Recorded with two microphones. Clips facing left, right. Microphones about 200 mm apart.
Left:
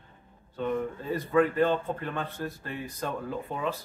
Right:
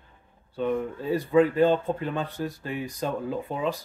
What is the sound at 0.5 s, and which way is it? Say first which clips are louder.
A man's voice: right 3 dB; 15° right (ahead or behind).